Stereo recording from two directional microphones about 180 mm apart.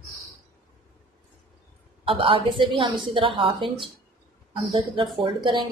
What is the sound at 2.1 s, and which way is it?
A woman's voice, 30° right (ahead or behind).